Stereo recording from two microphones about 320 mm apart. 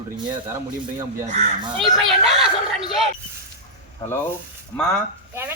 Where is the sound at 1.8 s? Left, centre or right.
Centre.